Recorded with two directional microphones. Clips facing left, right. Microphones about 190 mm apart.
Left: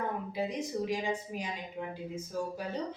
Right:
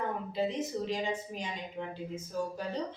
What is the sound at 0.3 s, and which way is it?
Speech, 10° left (ahead or behind).